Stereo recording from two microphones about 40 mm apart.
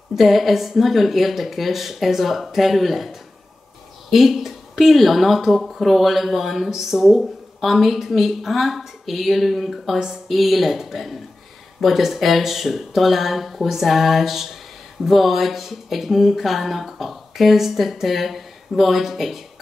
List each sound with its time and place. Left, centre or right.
0.1 s speech: centre
9.9 s speech: centre
10.2 s speech: centre